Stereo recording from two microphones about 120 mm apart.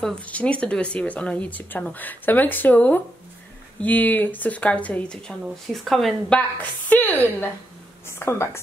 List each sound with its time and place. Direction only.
0.0 s a woman's voice: 10° left (ahead or behind)